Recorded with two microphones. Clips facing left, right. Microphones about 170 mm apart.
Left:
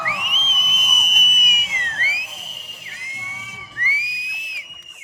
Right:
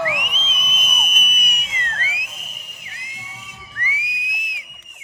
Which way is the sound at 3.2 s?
15° right (ahead or behind).